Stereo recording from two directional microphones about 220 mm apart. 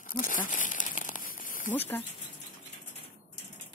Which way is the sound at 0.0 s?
40° left (ahead or behind).